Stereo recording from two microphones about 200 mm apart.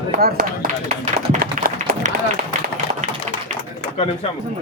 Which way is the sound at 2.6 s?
45° right (ahead or behind).